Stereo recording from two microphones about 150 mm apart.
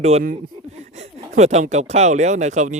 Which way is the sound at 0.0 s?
45° right (ahead or behind).